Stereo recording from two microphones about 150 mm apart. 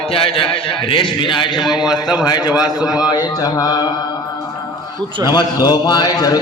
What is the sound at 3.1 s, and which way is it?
Speech, 25° left (ahead or behind).